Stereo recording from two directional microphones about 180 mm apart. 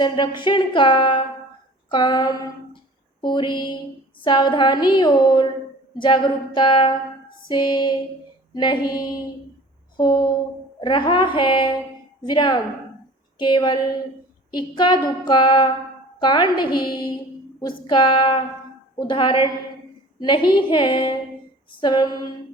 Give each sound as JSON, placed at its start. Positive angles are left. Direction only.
{"t": 0.0, "sound": "speech", "side_deg": 25}